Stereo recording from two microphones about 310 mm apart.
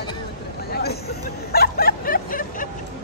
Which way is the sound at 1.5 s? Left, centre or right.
Left.